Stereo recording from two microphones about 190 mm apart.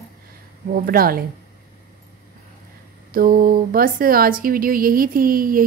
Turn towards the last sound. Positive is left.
turn(degrees=-50)  # may be behind; listen again after turning